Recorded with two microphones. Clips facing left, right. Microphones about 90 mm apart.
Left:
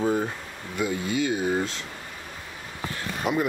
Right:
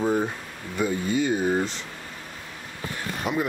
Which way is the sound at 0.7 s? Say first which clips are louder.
Right 2 dB; 10° left (ahead or behind).